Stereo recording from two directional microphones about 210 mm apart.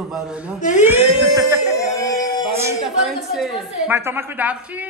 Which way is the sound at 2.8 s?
Centre (ahead or behind).